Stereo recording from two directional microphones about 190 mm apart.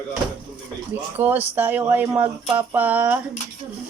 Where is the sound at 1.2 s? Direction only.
10° right (ahead or behind).